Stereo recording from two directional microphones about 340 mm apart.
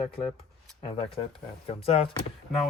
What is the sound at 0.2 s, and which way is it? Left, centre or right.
Speech, centre.